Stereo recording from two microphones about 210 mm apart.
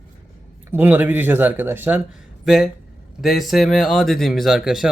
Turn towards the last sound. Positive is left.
turn(degrees=0)  # may be behind; listen again after turning